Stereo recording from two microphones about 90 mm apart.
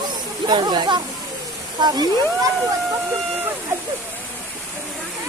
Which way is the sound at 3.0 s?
25° right (ahead or behind).